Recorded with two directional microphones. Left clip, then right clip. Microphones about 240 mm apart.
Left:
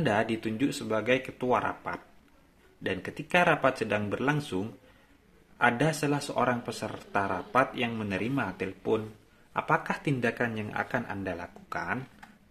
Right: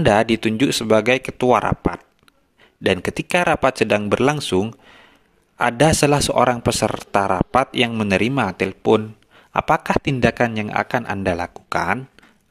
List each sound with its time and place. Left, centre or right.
0.0 s speech: right